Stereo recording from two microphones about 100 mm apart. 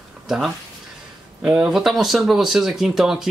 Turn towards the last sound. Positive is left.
turn(degrees=-5)  # may be behind; listen again after turning